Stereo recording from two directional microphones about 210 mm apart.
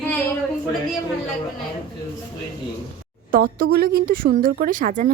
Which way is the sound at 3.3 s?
40° right (ahead or behind).